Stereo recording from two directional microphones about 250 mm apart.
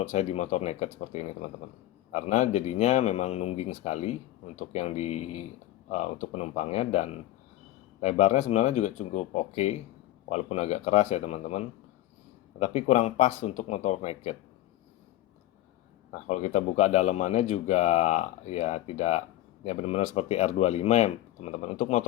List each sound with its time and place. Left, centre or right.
0.0 s speech: left
16.1 s speech: left